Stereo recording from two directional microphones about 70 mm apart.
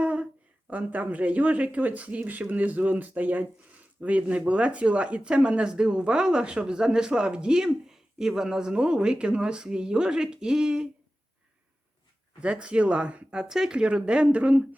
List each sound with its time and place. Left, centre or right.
0.0 s a sound: centre
0.7 s speech: right
12.4 s speech: centre